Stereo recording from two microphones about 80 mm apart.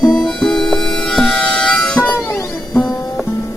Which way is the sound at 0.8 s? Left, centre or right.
Centre.